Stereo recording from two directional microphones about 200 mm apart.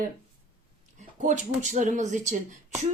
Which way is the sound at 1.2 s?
35° right (ahead or behind).